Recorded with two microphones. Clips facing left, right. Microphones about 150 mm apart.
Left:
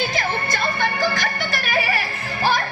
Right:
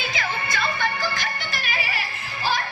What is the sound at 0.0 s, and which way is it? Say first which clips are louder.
Music: left 5 dB; 40° left (ahead or behind).